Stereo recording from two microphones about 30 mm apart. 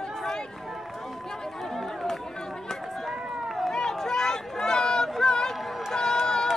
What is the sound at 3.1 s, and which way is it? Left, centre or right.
Run, centre.